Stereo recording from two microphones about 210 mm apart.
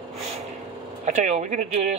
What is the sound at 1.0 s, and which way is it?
Speech, 35° right (ahead or behind).